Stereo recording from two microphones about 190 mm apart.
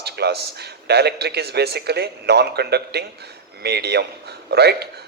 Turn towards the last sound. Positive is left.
turn(degrees=-60)  # may be behind; listen again after turning